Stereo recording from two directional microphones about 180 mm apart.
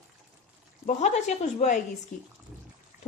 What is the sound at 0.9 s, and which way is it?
Speech, 40° left (ahead or behind).